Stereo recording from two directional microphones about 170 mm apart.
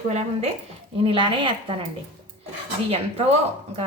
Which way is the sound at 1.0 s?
30° right (ahead or behind).